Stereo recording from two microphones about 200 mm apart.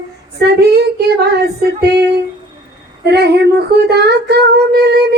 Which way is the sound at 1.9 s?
55° right (ahead or behind).